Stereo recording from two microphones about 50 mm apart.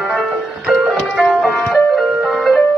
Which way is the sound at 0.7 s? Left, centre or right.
Centre.